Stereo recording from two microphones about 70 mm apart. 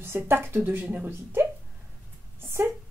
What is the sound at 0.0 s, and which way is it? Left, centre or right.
Speech, right.